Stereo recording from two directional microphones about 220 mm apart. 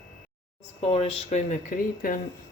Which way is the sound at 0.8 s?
30° left (ahead or behind).